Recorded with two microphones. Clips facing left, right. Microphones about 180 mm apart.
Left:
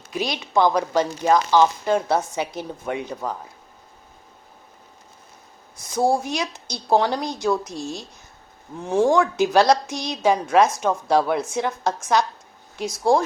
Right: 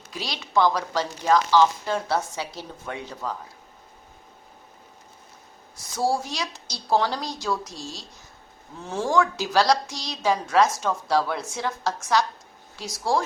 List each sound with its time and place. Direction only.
0.1 s speech: 20° left (ahead or behind)
6.3 s speech: 20° left (ahead or behind)
7.7 s speech: 55° left (ahead or behind)
8.8 s speech: 15° left (ahead or behind)